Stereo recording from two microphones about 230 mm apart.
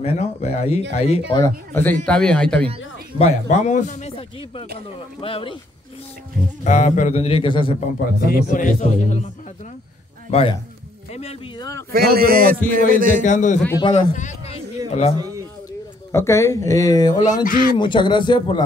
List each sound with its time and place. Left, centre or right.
0.0 s a man's voice: left
1.4 s speech: centre
3.2 s a man's voice: left
6.6 s a man's voice: left
8.3 s a man's voice: left
10.3 s a man's voice: left
11.9 s a man's voice: right
13.2 s a man's voice: left
15.1 s a man's voice: centre
16.1 s speech: centre
17.2 s a man's voice: left
17.7 s a man's voice: left